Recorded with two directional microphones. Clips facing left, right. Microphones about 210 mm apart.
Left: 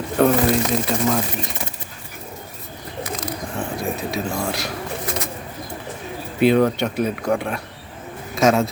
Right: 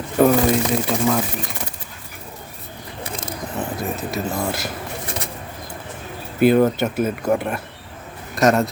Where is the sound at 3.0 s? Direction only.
30° right (ahead or behind).